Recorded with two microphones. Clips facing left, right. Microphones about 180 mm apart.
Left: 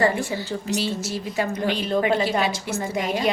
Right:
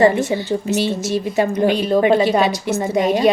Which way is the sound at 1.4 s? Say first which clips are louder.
Right 7 dB; 30° right (ahead or behind).